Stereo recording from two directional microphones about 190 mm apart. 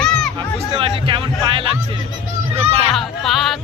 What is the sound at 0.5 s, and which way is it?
Speech, 30° right (ahead or behind).